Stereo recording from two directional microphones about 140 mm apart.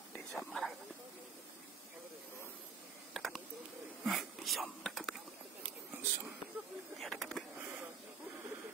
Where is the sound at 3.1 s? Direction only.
Centre (ahead or behind).